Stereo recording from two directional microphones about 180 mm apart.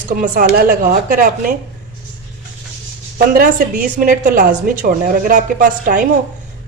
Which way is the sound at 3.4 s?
50° right (ahead or behind).